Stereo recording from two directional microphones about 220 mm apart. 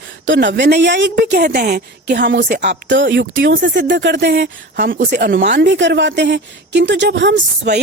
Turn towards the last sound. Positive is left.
turn(degrees=-50)  # may be behind; listen again after turning